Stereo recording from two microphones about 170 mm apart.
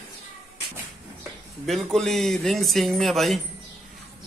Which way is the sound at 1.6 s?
Centre (ahead or behind).